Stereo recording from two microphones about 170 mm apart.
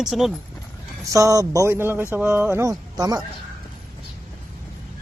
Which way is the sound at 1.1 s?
20° right (ahead or behind).